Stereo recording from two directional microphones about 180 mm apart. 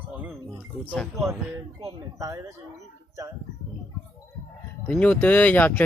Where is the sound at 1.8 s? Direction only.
20° right (ahead or behind).